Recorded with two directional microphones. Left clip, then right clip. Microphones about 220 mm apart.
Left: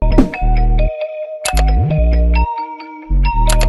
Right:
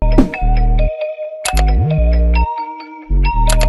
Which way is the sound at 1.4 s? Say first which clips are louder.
Left 1 dB; centre (ahead or behind).